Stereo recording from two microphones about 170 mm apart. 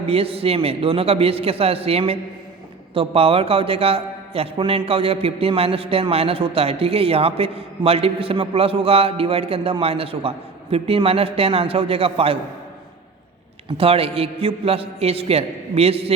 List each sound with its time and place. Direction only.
0.1 s a man's voice: 35° right (ahead or behind)
13.7 s a man's voice: 35° right (ahead or behind)